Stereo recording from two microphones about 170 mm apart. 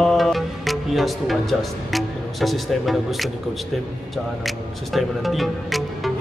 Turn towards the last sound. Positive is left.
turn(degrees=0)  # may be behind; listen again after turning